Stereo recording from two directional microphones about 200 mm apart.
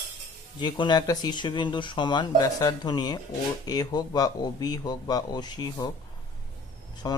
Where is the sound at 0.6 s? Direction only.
20° left (ahead or behind).